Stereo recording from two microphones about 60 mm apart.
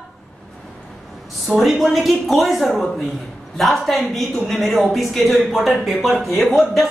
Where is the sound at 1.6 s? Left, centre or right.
Centre.